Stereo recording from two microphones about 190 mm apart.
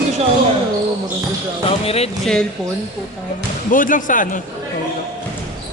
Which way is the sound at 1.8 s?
30° left (ahead or behind).